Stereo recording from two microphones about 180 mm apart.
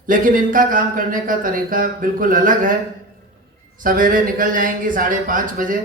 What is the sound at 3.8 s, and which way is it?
Speech, 50° right (ahead or behind).